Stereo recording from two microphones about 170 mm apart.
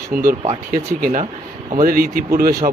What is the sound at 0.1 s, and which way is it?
Speech, 60° right (ahead or behind).